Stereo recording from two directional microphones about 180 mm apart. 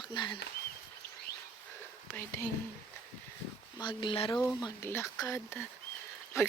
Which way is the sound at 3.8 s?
25° left (ahead or behind).